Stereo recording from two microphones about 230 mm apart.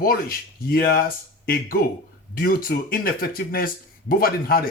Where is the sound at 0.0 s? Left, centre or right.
Left.